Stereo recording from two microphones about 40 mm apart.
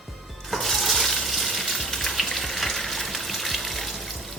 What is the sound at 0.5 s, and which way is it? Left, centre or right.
Water, centre.